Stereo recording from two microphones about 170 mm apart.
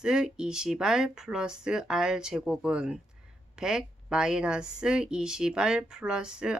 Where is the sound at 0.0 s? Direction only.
5° right (ahead or behind).